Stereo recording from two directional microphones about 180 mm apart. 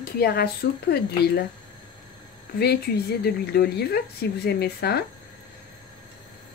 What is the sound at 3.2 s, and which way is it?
Speech, 65° left (ahead or behind).